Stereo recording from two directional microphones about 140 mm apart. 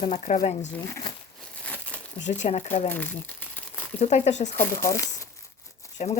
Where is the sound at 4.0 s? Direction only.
55° left (ahead or behind).